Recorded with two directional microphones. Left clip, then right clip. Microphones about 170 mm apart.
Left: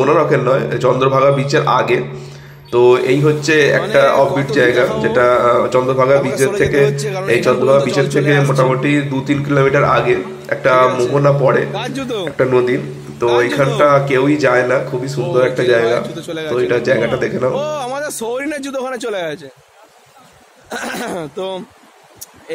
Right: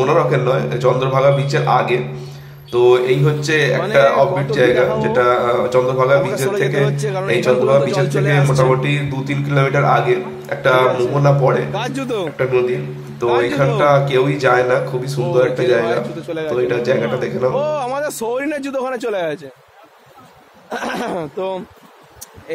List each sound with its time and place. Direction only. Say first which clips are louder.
0.1 s a man's voice: left 2 dB; 15° left (ahead or behind)
13.7 s a man's voice: left 1 dB; 15° left (ahead or behind)
16.5 s a man's voice: left 3 dB; 10° left (ahead or behind)
20.7 s speech: right 1 dB; 20° left (ahead or behind)